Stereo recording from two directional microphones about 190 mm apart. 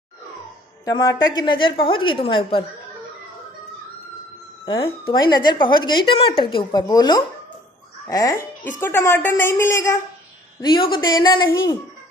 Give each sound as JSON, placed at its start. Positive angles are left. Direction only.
{"t": 0.8, "sound": "speech", "side_deg": 20}
{"t": 4.6, "sound": "a woman's voice", "side_deg": 30}